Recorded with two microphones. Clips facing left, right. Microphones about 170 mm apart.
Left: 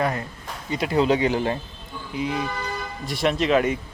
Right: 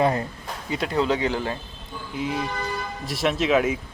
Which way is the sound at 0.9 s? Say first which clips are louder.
Left 4 dB; 15° left (ahead or behind).